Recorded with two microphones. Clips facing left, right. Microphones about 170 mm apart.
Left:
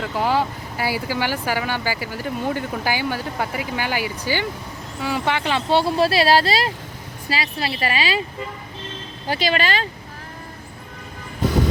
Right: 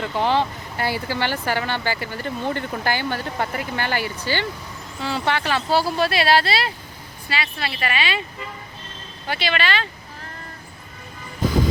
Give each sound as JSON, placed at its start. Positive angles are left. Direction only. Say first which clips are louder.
{"t": 0.0, "sound": "speech", "louder": "even", "side_deg": 5}
{"t": 9.2, "sound": "speech", "louder": "left 3 dB", "side_deg": 35}